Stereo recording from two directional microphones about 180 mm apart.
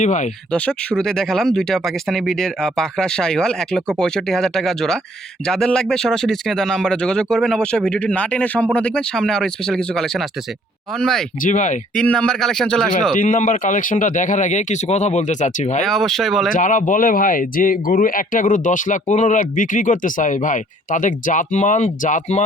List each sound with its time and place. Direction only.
0.0 s speech: 45° left (ahead or behind)
0.5 s speech: 5° left (ahead or behind)
11.4 s speech: 45° left (ahead or behind)
11.9 s speech: 5° left (ahead or behind)
13.1 s speech: 45° left (ahead or behind)
15.8 s speech: centre (ahead or behind)
16.5 s speech: 45° left (ahead or behind)